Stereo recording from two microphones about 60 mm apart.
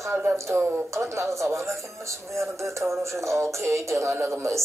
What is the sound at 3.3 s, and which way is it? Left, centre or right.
Music, right.